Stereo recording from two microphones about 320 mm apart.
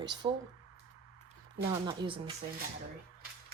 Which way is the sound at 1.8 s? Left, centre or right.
Centre.